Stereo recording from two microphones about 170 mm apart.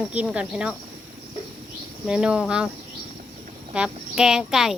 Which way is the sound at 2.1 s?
5° right (ahead or behind).